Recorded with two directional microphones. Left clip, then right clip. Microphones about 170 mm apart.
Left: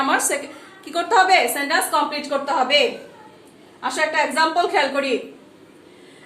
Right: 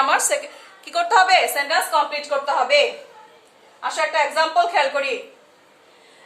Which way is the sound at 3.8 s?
20° right (ahead or behind).